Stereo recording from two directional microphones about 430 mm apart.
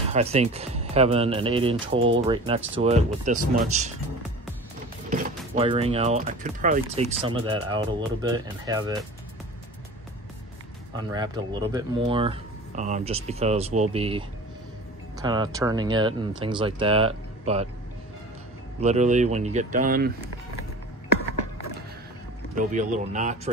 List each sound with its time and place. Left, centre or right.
0.1 s speech: centre
5.1 s speech: centre
11.0 s speech: centre
18.8 s speech: centre
22.6 s speech: centre